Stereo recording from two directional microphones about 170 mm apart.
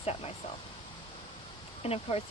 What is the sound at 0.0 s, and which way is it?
Speech, 35° left (ahead or behind).